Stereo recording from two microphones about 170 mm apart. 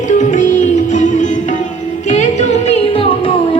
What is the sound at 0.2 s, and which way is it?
Music, 45° left (ahead or behind).